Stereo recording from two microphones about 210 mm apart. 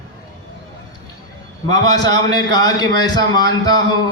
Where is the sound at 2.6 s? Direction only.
20° left (ahead or behind).